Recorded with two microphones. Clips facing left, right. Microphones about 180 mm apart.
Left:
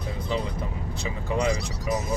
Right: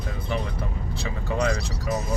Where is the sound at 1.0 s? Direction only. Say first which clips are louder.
Even; 15° left (ahead or behind).